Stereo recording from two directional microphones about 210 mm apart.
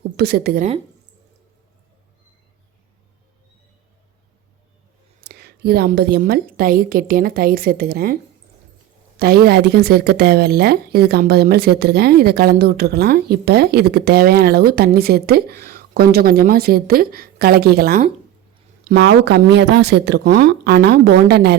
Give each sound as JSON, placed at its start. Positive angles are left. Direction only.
{"t": 0.2, "sound": "speech", "side_deg": -50}
{"t": 5.2, "sound": "speech", "side_deg": -50}